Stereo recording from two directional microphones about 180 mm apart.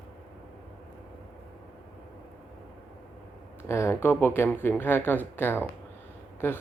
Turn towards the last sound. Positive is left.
turn(degrees=10)  # may be behind; listen again after turning